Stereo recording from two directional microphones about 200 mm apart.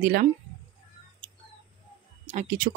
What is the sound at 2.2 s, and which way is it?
Speech, 40° right (ahead or behind).